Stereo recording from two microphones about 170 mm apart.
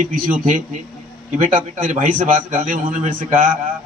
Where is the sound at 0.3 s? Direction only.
45° right (ahead or behind).